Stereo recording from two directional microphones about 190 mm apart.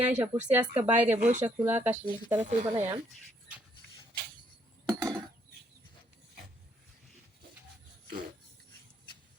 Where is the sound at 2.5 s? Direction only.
40° right (ahead or behind).